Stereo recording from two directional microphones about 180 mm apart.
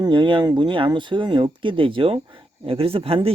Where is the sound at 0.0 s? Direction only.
25° right (ahead or behind).